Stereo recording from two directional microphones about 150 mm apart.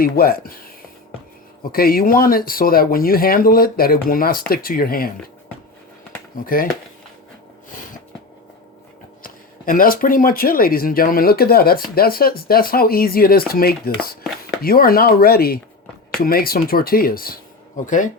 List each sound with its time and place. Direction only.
0.0 s speech: 80° left
1.7 s speech: 80° left
6.4 s speech: 70° left (ahead or behind)
7.7 s a sound: 60° left (ahead or behind)
9.2 s speech: 70° left (ahead or behind)